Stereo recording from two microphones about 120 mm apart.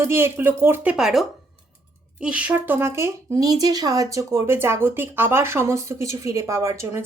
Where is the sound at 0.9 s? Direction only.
5° right (ahead or behind); by 7.0 s 20° right (ahead or behind).